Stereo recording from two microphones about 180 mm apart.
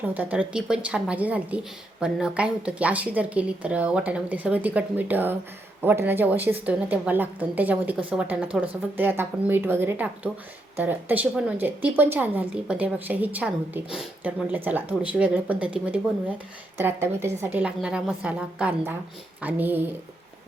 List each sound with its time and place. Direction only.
0.0 s a woman's voice: 10° right (ahead or behind)